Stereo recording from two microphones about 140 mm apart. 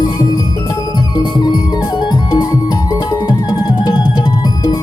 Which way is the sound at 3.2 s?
30° left (ahead or behind).